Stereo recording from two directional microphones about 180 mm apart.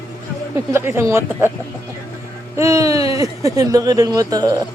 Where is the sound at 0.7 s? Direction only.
15° right (ahead or behind).